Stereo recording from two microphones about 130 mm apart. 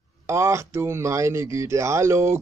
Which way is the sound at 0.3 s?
20° right (ahead or behind).